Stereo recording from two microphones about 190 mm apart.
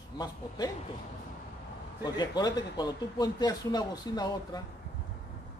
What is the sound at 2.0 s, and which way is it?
Speech, 20° left (ahead or behind).